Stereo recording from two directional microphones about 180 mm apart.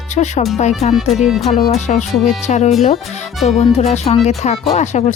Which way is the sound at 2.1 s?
Centre (ahead or behind).